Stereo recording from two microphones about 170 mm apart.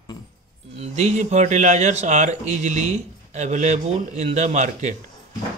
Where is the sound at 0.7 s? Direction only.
40° right (ahead or behind).